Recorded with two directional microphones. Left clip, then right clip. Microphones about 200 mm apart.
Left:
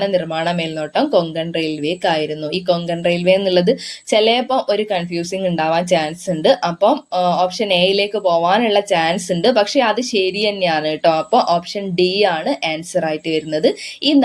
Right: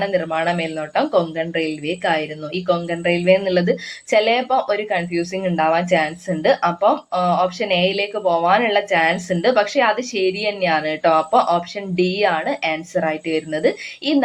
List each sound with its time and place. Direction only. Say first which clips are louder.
0.0 s speech: left 1 dB; 45° left (ahead or behind)